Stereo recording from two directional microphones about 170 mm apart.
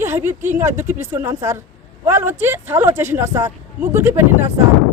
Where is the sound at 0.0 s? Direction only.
15° right (ahead or behind).